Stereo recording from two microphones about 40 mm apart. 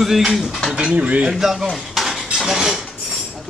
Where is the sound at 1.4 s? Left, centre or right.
Centre.